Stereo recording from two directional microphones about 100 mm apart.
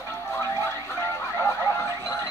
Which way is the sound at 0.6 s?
25° left (ahead or behind).